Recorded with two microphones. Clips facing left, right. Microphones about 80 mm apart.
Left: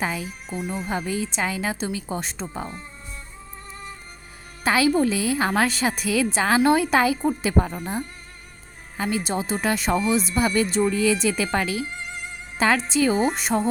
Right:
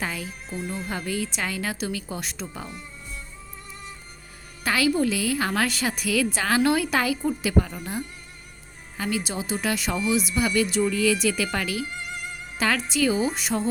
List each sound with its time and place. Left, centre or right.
0.0 s a woman's voice: centre; by 2.8 s left
4.6 s a woman's voice: left